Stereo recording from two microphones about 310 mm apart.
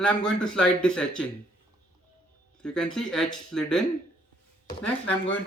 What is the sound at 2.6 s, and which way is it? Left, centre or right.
Speech, centre.